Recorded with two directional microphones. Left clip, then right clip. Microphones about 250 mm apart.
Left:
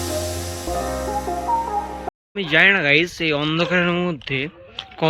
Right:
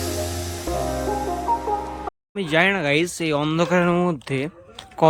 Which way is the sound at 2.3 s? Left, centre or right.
Centre.